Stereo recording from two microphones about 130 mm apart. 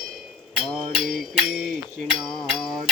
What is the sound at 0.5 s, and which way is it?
Mantra, centre (ahead or behind).